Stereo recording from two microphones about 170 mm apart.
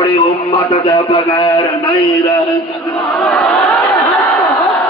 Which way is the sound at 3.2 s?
5° left (ahead or behind).